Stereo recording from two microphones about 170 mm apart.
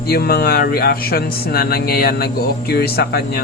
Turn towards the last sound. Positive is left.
turn(degrees=70)  # may be behind; listen again after turning